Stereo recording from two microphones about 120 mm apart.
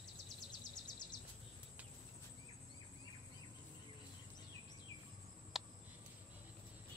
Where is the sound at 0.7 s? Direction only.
35° left (ahead or behind).